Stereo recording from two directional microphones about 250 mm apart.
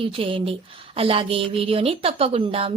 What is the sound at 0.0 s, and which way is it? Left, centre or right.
A woman's voice, right.